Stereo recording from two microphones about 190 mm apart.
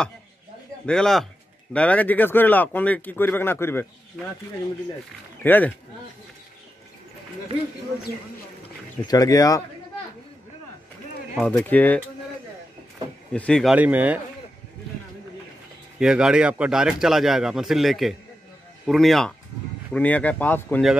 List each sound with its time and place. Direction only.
0.8 s speech: 5° left (ahead or behind)
5.4 s speech: 10° left (ahead or behind)
9.0 s speech: 20° left (ahead or behind)
11.3 s speech: 5° left (ahead or behind)
13.3 s speech: 5° left (ahead or behind)
13.7 s a man's voice: 10° right (ahead or behind)
16.0 s speech: 5° right (ahead or behind)